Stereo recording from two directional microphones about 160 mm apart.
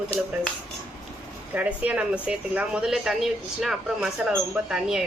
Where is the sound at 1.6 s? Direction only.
10° right (ahead or behind).